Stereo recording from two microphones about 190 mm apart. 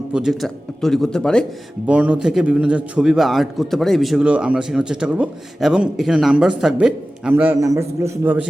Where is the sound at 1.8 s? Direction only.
5° right (ahead or behind).